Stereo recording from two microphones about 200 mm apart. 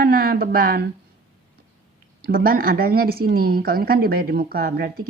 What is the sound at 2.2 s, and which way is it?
A woman's voice, 45° right (ahead or behind).